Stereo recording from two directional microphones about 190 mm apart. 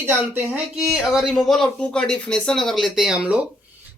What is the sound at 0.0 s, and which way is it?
Speech, 10° right (ahead or behind).